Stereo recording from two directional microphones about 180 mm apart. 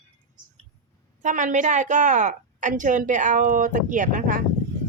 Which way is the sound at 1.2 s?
45° right (ahead or behind).